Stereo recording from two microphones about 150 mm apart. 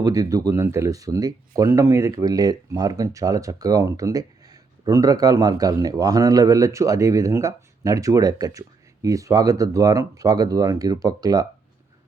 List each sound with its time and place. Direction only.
0.0 s speech: 25° right (ahead or behind)